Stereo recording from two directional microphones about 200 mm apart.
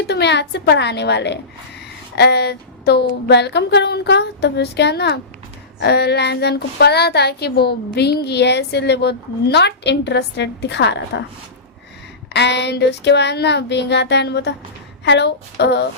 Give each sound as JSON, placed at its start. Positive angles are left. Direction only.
{"t": 0.1, "sound": "a woman's voice", "side_deg": 60}
{"t": 12.3, "sound": "a woman's voice", "side_deg": 60}